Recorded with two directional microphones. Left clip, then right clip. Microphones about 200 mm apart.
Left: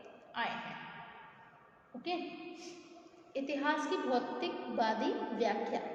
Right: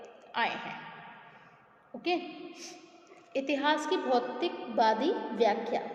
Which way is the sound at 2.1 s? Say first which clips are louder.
Right 7 dB; 25° right (ahead or behind).